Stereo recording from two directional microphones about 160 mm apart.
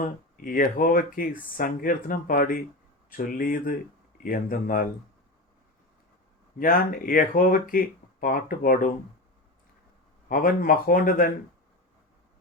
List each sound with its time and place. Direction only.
0.0 s speech: 60° left (ahead or behind)
6.6 s speech: 60° left (ahead or behind)
10.2 s speech: 60° left (ahead or behind)